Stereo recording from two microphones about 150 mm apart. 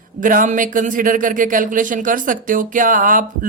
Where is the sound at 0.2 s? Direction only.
65° right (ahead or behind).